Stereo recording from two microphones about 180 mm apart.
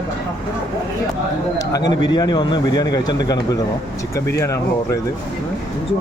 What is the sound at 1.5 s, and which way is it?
Speech, 20° left (ahead or behind).